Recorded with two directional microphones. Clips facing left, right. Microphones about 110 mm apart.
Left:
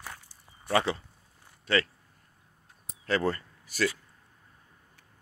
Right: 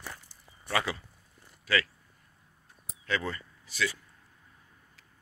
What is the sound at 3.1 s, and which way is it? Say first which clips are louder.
Speech: left 5 dB; 40° left (ahead or behind).